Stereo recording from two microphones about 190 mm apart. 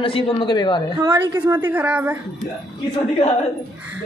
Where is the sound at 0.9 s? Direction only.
20° right (ahead or behind).